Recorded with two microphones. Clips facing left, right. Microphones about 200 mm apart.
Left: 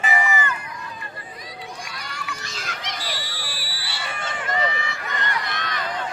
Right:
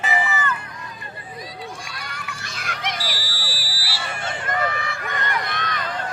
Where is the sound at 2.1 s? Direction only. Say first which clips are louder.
Left 1 dB; 55° right (ahead or behind).